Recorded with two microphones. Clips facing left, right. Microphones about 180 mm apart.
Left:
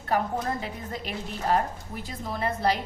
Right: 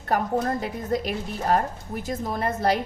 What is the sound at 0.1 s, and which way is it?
A woman's voice, 40° right (ahead or behind).